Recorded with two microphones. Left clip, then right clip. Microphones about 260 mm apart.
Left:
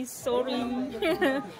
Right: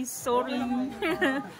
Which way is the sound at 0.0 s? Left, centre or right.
Centre.